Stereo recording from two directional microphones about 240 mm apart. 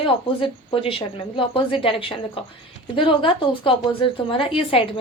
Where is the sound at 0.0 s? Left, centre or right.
Left.